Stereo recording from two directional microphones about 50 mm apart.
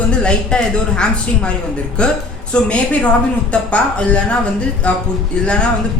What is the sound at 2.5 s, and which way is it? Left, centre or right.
A woman's voice, left.